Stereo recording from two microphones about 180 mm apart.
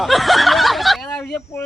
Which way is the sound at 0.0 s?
Centre (ahead or behind).